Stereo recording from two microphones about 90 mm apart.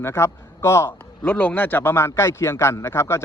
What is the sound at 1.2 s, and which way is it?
A man's voice, 20° left (ahead or behind).